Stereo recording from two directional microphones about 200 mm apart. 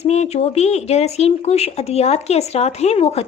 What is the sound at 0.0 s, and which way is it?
Speech, 35° left (ahead or behind).